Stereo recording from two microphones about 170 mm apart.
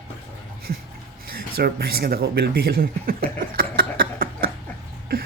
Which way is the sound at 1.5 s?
65° right (ahead or behind).